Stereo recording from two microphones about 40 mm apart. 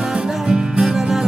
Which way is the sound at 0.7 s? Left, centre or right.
Centre.